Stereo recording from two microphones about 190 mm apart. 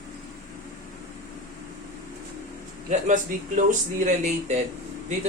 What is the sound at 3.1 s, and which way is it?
Speech, 40° right (ahead or behind).